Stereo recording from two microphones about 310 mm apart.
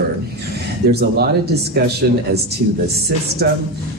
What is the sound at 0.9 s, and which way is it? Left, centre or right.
Speech, right.